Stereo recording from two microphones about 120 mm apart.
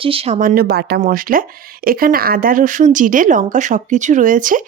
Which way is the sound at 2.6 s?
90° right.